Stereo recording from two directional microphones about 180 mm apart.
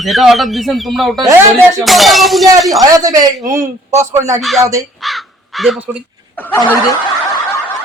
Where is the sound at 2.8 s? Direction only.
20° right (ahead or behind).